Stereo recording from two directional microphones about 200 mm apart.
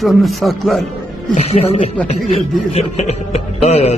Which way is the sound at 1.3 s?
30° left (ahead or behind).